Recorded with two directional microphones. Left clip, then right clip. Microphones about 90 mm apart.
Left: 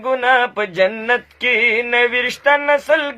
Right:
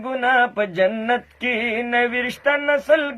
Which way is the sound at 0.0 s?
25° left (ahead or behind).